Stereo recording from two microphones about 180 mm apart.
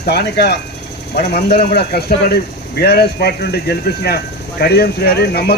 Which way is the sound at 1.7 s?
60° left (ahead or behind).